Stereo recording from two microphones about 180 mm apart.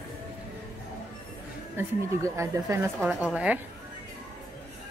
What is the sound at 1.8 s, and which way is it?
Speech, 15° right (ahead or behind).